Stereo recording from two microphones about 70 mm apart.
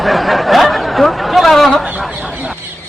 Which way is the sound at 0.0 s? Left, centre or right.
Centre.